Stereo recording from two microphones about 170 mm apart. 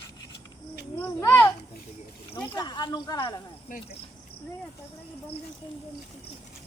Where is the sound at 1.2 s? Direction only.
15° left (ahead or behind).